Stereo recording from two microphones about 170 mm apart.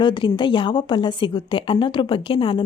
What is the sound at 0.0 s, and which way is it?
A woman's voice, 30° left (ahead or behind).